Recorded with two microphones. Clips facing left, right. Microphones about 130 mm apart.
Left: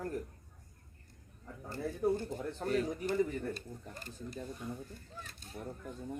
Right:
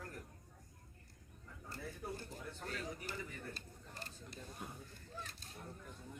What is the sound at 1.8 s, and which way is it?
Speech, 60° left (ahead or behind).